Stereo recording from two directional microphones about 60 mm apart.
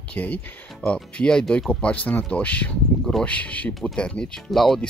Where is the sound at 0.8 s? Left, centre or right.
Centre.